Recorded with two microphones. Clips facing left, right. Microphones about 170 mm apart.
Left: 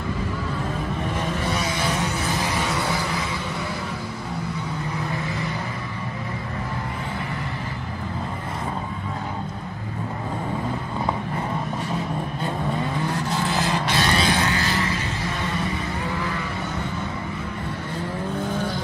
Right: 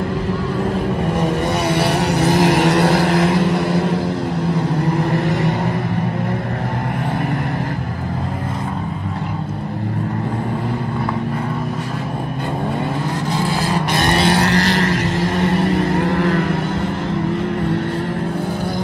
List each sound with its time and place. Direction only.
1.2 s vehicle: 65° right (ahead or behind)
13.9 s vehicle: 60° right (ahead or behind)